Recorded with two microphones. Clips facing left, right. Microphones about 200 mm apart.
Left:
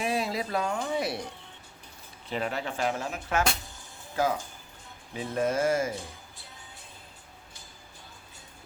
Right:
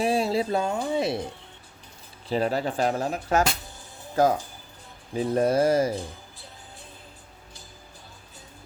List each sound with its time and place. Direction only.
0.0 s speech: 30° right (ahead or behind)
2.3 s speech: 35° right (ahead or behind)